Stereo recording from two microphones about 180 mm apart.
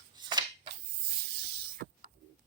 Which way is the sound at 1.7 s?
55° right (ahead or behind).